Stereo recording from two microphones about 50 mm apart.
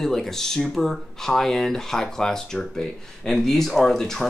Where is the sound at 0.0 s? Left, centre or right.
Centre.